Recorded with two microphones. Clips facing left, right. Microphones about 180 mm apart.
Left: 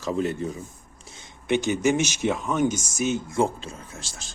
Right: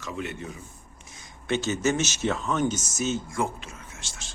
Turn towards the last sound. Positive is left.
turn(degrees=35)  # may be behind; listen again after turning